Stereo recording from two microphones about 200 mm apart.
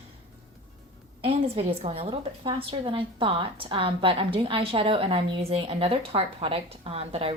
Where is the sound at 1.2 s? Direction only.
30° right (ahead or behind).